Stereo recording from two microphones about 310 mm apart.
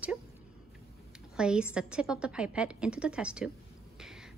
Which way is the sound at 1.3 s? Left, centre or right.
Centre.